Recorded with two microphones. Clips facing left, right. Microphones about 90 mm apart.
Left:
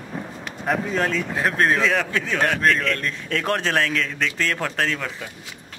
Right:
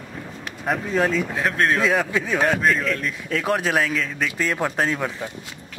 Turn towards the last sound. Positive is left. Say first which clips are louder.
# right 2 dB
turn(degrees=-20)  # may be behind; listen again after turning